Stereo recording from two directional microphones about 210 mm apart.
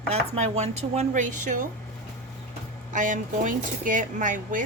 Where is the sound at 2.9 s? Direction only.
35° right (ahead or behind).